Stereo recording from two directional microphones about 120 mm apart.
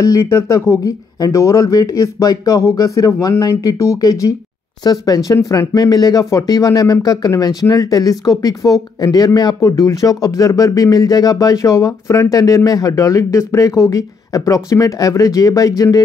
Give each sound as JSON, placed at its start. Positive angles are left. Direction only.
{"t": 0.0, "sound": "speech", "side_deg": 25}